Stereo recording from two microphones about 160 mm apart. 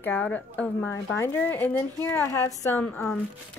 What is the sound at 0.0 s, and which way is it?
Speech, 10° left (ahead or behind).